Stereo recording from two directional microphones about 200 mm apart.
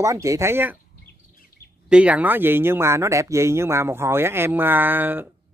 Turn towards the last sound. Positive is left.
turn(degrees=-10)  # may be behind; listen again after turning